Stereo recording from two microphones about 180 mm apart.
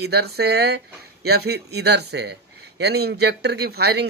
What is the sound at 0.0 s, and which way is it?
Speech, 65° right (ahead or behind).